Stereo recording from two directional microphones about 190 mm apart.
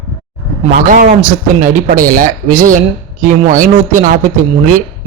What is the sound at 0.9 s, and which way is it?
A man's voice, 45° right (ahead or behind).